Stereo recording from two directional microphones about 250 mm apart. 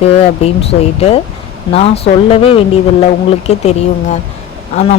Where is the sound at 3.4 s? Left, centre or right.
Left.